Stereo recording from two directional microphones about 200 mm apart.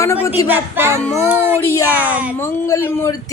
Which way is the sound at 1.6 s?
15° left (ahead or behind).